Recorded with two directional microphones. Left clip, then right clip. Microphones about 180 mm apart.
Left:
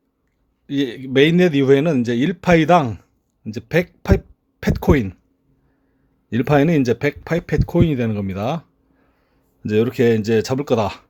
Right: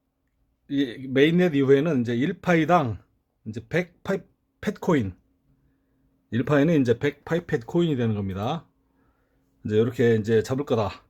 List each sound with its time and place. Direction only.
0.7 s speech: 25° left (ahead or behind)
6.2 s speech: 20° left (ahead or behind)
9.6 s speech: 20° left (ahead or behind)